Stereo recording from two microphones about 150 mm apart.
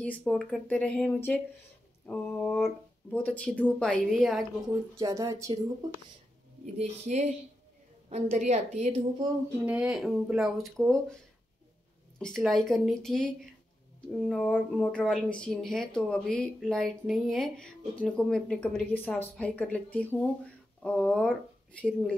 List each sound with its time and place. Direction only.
0.0 s speech: 10° left (ahead or behind)
4.9 s speech: 20° right (ahead or behind)
6.6 s a woman's voice: 50° right (ahead or behind)
9.7 s speech: 5° right (ahead or behind)
12.2 s speech: centre (ahead or behind)